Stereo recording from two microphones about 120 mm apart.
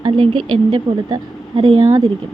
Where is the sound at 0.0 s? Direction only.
40° right (ahead or behind).